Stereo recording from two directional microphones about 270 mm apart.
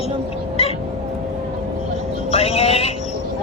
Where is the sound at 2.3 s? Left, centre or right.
Left.